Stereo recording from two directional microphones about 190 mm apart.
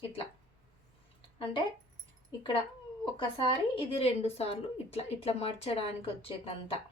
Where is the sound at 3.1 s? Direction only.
25° left (ahead or behind).